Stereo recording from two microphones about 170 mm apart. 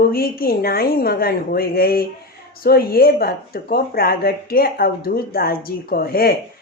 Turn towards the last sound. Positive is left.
turn(degrees=60)  # may be behind; listen again after turning